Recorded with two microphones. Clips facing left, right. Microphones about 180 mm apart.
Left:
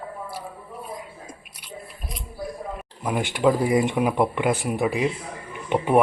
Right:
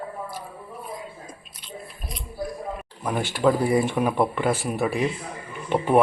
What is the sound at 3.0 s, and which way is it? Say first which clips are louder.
Speech: left 1 dB; 15° left (ahead or behind).